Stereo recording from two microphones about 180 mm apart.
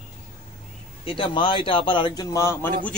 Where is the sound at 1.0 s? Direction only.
30° left (ahead or behind).